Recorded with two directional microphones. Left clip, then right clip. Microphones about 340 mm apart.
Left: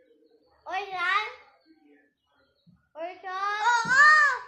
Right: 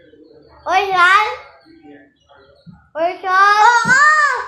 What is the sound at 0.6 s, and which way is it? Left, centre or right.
Speech, centre.